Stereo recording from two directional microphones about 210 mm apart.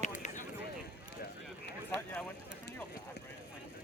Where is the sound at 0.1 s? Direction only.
35° left (ahead or behind).